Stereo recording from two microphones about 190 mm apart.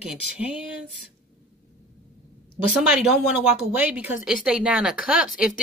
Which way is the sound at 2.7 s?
5° right (ahead or behind).